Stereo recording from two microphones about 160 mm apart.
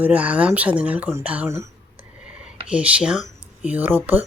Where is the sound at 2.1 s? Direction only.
5° right (ahead or behind).